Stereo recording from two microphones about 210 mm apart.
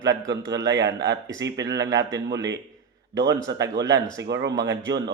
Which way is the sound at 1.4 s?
15° right (ahead or behind).